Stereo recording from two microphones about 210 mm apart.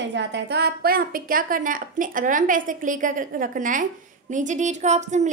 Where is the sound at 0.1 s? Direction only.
55° right (ahead or behind).